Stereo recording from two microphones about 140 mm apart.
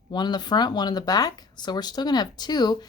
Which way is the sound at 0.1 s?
30° left (ahead or behind).